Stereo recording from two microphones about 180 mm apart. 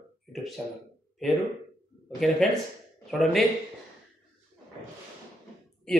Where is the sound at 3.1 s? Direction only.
Centre (ahead or behind).